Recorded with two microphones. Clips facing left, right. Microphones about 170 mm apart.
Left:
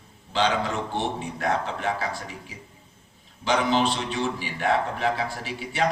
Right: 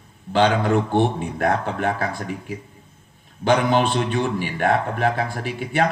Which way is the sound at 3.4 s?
55° right (ahead or behind).